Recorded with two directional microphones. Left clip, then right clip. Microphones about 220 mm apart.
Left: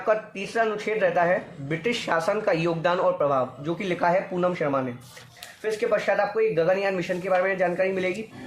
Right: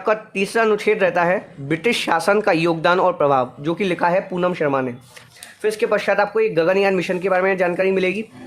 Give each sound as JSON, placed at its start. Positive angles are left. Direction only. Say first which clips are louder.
{"t": 0.0, "sound": "speech", "louder": "right 5 dB", "side_deg": -50}